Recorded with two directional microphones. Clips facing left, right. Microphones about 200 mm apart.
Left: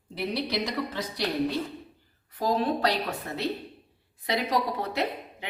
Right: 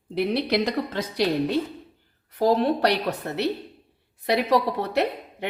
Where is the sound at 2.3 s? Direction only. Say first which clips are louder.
Right 6 dB; 70° right (ahead or behind).